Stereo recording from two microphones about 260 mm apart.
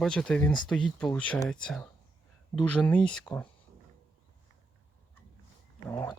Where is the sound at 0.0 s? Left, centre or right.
Centre.